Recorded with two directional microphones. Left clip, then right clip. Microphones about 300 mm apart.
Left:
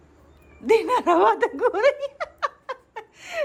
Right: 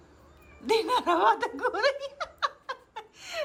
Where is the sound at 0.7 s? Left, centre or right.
Centre.